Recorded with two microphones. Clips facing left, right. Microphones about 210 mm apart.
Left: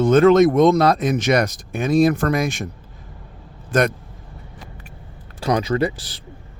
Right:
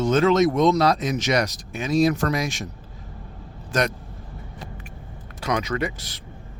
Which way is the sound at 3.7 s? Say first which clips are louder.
Left 5 dB; 55° left (ahead or behind).